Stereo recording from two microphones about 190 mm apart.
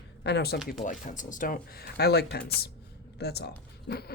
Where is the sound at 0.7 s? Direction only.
45° left (ahead or behind).